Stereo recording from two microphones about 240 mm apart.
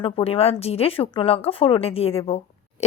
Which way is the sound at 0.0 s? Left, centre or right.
Left.